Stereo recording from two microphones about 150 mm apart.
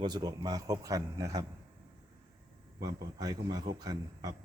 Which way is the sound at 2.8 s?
25° right (ahead or behind).